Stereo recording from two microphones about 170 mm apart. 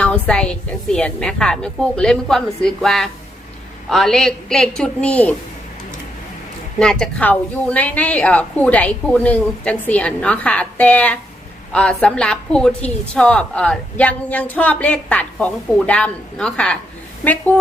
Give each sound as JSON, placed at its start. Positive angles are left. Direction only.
{"t": 0.0, "sound": "a woman's voice", "side_deg": 5}
{"t": 6.7, "sound": "a woman's voice", "side_deg": 5}